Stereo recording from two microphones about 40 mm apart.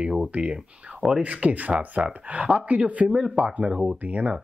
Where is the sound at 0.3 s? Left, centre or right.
Right.